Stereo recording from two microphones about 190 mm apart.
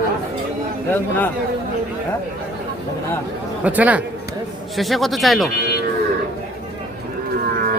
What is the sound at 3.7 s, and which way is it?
A man's voice, 10° right (ahead or behind).